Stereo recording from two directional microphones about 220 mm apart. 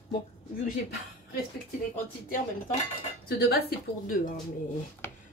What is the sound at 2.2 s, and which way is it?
Speech, 40° left (ahead or behind).